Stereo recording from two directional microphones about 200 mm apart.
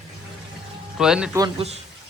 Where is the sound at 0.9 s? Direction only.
5° right (ahead or behind).